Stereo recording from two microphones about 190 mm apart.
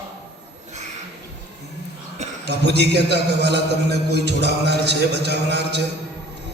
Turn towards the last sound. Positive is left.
turn(degrees=-60)  # may be behind; listen again after turning